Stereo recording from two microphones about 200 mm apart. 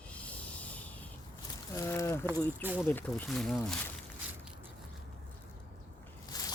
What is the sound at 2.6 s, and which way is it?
Speech, 10° right (ahead or behind).